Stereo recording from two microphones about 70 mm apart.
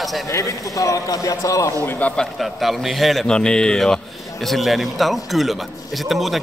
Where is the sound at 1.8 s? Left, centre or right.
Left.